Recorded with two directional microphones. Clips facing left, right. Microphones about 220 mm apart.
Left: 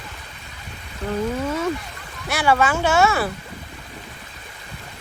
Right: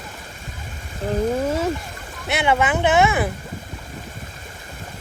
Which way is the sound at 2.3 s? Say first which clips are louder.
Even; 20° right (ahead or behind).